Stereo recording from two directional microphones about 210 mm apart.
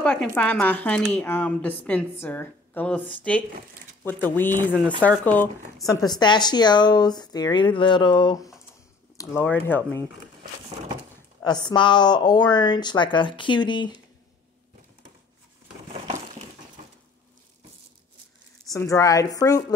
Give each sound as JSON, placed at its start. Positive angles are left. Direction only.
{"t": 0.0, "sound": "speech", "side_deg": 5}
{"t": 6.0, "sound": "speech", "side_deg": 20}
{"t": 11.4, "sound": "speech", "side_deg": 20}
{"t": 18.7, "sound": "speech", "side_deg": 15}